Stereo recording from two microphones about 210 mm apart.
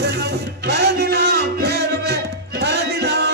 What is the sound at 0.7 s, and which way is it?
Music, 50° right (ahead or behind).